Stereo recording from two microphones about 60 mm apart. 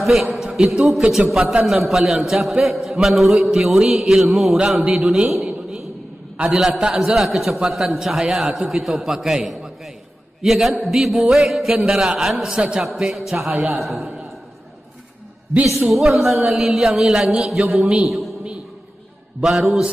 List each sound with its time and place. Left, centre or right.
0.0 s a man's voice: centre
0.4 s a sound: centre
0.7 s a man's voice: centre
5.3 s a sound: centre
6.8 s a man's voice: centre
13.7 s a man's voice: centre
15.6 s a man's voice: centre
19.4 s a man's voice: centre